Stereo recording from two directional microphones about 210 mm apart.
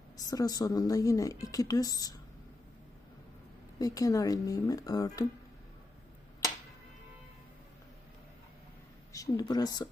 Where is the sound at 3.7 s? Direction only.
15° left (ahead or behind).